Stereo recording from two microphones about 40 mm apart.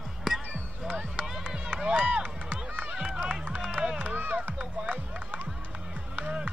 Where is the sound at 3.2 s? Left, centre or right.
Right.